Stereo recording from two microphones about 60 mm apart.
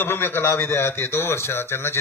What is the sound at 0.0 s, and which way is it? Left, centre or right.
A man's voice, left.